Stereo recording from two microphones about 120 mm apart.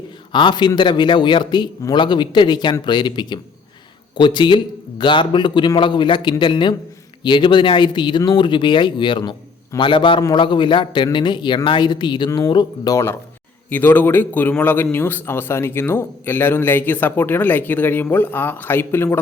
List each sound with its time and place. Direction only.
0.3 s a man's voice: 40° left (ahead or behind)
13.7 s a man's voice: 15° left (ahead or behind)